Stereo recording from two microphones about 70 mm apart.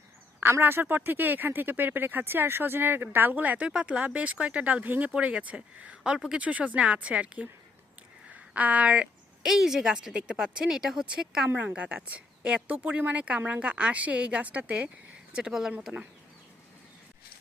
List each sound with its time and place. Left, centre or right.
0.6 s speech: right
8.5 s speech: centre
9.5 s speech: centre
11.4 s speech: right
11.7 s speech: centre